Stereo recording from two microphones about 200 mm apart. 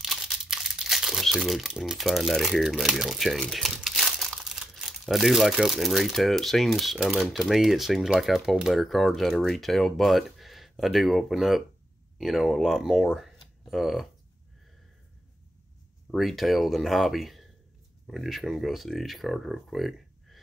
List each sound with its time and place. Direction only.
0.0 s speech: centre (ahead or behind)
16.1 s speech: centre (ahead or behind)